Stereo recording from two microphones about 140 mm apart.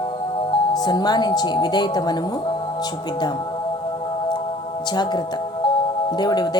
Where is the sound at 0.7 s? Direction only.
30° left (ahead or behind).